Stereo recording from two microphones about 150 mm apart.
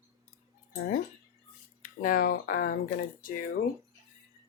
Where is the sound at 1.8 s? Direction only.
70° left (ahead or behind).